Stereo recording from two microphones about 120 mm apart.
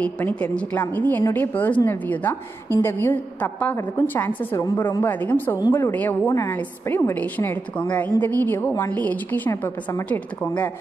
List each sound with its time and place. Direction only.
0.0 s a woman's voice: 15° left (ahead or behind)